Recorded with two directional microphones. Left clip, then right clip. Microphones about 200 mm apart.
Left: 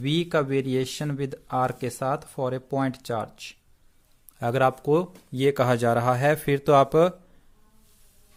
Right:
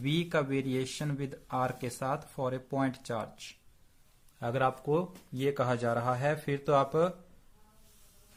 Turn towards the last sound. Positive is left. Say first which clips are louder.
# left 9 dB
turn(degrees=45)  # may be behind; listen again after turning